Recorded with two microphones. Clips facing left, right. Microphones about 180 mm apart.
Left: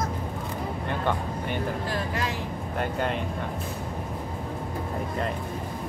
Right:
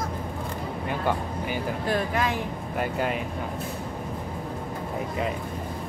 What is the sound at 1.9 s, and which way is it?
Speech, 55° right (ahead or behind).